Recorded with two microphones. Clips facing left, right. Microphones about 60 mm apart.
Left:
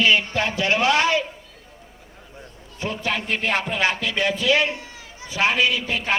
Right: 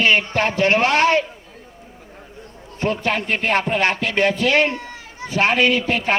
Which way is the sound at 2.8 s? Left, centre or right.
Right.